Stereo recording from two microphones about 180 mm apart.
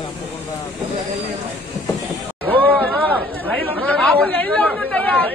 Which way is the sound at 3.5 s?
5° left (ahead or behind).